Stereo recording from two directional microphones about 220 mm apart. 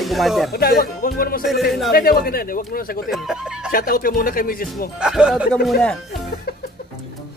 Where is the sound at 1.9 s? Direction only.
45° left (ahead or behind).